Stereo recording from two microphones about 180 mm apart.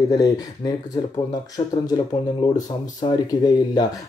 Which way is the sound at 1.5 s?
20° left (ahead or behind).